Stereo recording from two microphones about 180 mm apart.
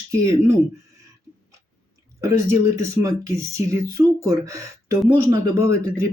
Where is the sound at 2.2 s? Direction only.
15° right (ahead or behind).